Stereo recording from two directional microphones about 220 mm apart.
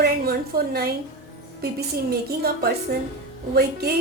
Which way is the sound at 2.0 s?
45° right (ahead or behind).